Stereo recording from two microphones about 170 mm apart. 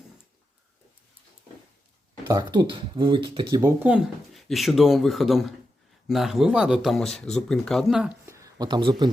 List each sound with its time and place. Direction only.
2.2 s speech: 25° right (ahead or behind)
3.8 s speech: 5° right (ahead or behind)
8.3 s a sound: 20° right (ahead or behind)